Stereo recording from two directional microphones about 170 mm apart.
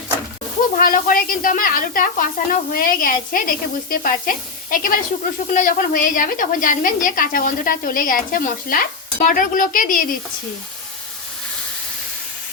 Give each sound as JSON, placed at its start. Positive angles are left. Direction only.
{"t": 0.8, "sound": "a woman's voice", "side_deg": 55}